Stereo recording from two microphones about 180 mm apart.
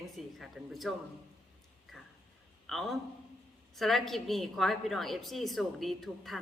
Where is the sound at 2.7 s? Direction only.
Centre (ahead or behind).